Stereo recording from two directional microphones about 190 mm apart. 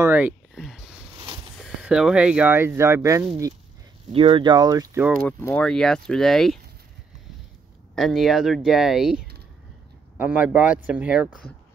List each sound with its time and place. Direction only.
0.0 s a sound: 10° right (ahead or behind)
1.6 s speech: 5° right (ahead or behind)
4.1 s speech: 30° right (ahead or behind)
5.2 s speech: 10° left (ahead or behind)
7.9 s speech: centre (ahead or behind)